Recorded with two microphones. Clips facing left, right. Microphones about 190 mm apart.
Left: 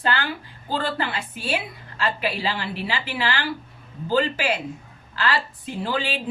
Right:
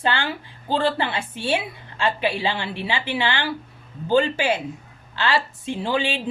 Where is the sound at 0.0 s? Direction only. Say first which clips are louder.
Right 1 dB; 25° right (ahead or behind).